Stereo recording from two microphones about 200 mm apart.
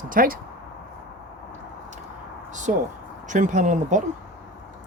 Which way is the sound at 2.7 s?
35° right (ahead or behind).